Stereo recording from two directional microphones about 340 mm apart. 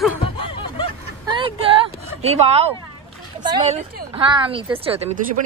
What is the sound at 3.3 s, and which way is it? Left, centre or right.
Speech, centre.